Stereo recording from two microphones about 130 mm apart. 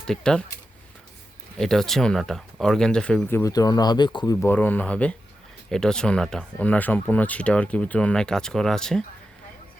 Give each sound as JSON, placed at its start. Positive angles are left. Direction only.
{"t": 0.1, "sound": "speech", "side_deg": 5}
{"t": 1.5, "sound": "speech", "side_deg": 5}
{"t": 3.3, "sound": "speech", "side_deg": 25}
{"t": 4.4, "sound": "speech", "side_deg": 15}